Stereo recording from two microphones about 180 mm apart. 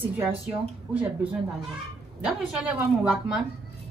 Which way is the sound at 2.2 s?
5° right (ahead or behind).